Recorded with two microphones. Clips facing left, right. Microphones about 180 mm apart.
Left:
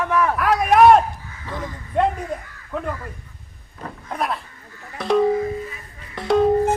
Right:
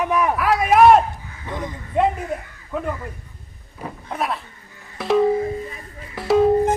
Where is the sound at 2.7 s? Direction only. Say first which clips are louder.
Right 1 dB; 5° right (ahead or behind).